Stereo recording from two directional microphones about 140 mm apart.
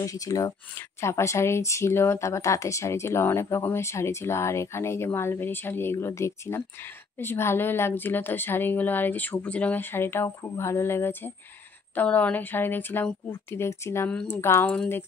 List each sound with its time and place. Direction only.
0.0 s a woman's voice: 25° left (ahead or behind)